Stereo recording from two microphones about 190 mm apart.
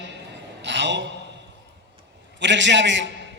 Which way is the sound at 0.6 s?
70° right (ahead or behind).